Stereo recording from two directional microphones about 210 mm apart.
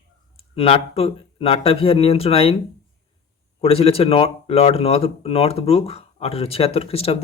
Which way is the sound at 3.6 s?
30° left (ahead or behind).